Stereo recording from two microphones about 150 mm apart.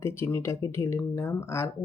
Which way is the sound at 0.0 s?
15° left (ahead or behind).